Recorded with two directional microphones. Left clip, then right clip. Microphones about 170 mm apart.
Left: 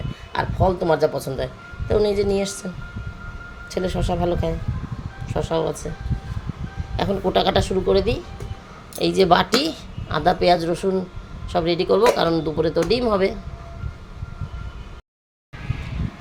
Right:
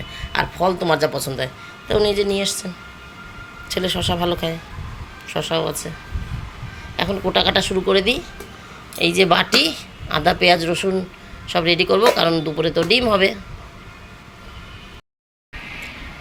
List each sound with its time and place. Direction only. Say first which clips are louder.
0.3 s a woman's voice: right 2 dB; 5° left (ahead or behind)
6.9 s a sound: right 1 dB; 15° left (ahead or behind)
7.3 s a woman's voice: right 2 dB; 15° left (ahead or behind)
7.9 s speech: right 3 dB; centre (ahead or behind)
9.0 s a woman's voice: right 1 dB; 15° left (ahead or behind)